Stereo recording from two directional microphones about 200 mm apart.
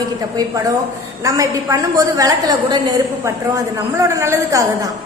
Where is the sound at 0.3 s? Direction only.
15° right (ahead or behind).